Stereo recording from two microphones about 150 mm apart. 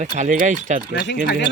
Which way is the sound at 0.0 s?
55° right (ahead or behind).